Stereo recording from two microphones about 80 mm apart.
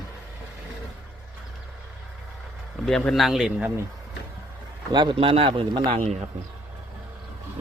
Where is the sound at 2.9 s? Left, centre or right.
Centre.